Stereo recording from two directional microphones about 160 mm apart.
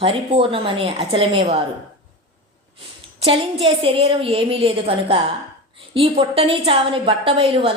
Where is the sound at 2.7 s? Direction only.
35° right (ahead or behind).